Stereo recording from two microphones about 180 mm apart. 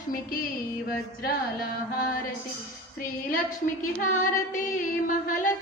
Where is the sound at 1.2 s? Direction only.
55° left (ahead or behind).